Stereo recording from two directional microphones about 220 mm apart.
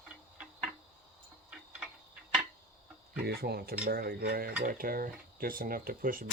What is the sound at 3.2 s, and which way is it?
Speech, 45° right (ahead or behind).